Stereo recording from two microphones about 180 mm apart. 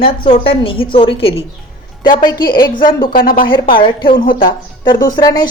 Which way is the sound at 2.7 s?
50° left (ahead or behind).